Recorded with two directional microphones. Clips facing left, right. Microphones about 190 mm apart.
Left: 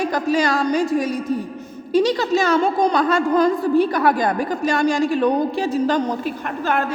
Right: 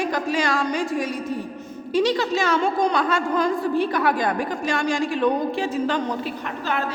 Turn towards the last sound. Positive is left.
turn(degrees=50)  # may be behind; listen again after turning